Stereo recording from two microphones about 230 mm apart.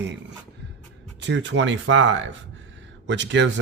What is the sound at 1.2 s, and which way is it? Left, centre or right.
Speech, right.